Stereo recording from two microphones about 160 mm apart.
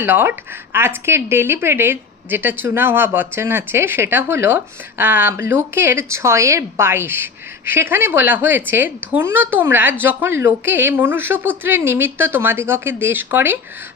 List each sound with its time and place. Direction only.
0.0 s speech: 15° right (ahead or behind)